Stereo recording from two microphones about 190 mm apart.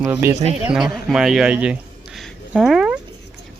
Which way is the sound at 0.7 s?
Centre (ahead or behind).